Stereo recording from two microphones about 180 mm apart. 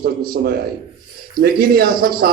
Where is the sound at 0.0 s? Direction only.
55° right (ahead or behind).